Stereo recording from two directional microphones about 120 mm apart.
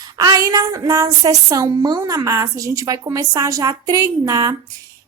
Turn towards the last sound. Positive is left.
turn(degrees=-30)  # may be behind; listen again after turning